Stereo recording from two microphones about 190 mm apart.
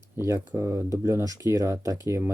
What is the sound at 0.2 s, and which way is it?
Speech, 15° right (ahead or behind).